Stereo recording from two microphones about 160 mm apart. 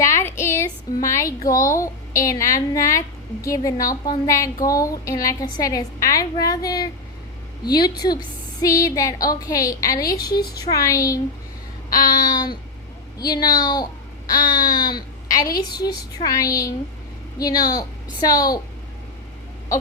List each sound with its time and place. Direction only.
0.0 s a sound: 15° left (ahead or behind)
1.0 s a woman's voice: 20° left (ahead or behind)
10.2 s a woman's voice: 75° left (ahead or behind)
10.6 s a woman's voice: 20° left (ahead or behind)